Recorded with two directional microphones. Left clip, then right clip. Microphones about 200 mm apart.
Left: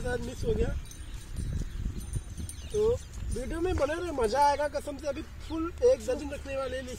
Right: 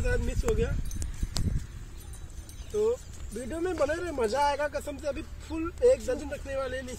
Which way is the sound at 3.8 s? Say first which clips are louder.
Right 3 dB; 15° right (ahead or behind).